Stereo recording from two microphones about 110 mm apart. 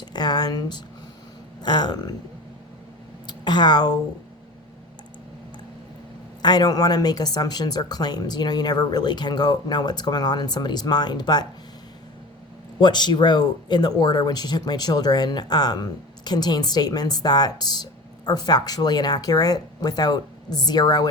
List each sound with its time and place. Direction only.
0.0 s a sound: 40° left (ahead or behind)
1.6 s a woman's voice: 40° left (ahead or behind)
3.2 s speech: 40° left (ahead or behind)
6.4 s a woman's voice: 40° left (ahead or behind)
12.8 s a woman's voice: 40° left (ahead or behind)